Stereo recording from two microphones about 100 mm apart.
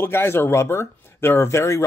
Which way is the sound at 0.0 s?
25° left (ahead or behind).